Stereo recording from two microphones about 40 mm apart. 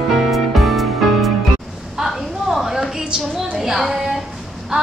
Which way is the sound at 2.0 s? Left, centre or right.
Centre.